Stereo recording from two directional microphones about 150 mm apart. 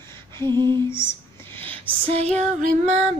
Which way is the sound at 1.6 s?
40° right (ahead or behind).